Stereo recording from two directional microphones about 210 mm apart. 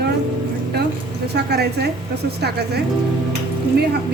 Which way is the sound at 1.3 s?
50° right (ahead or behind).